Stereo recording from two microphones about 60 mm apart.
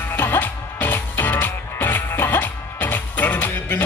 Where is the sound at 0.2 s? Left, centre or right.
Left.